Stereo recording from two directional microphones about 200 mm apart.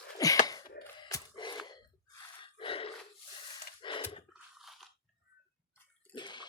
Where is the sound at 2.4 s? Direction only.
25° left (ahead or behind).